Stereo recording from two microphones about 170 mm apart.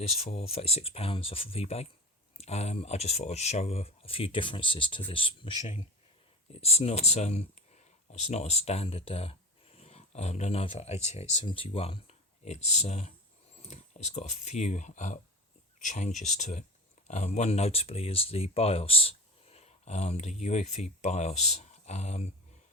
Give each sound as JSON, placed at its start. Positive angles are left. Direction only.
{"t": 0.1, "sound": "speech", "side_deg": 40}